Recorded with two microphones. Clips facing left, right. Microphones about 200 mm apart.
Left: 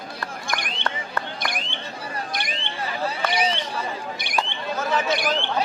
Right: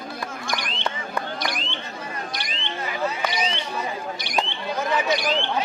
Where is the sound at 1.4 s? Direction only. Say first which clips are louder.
Right 1 dB; 55° left (ahead or behind).